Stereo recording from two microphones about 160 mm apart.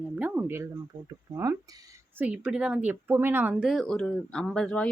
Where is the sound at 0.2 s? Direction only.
10° right (ahead or behind).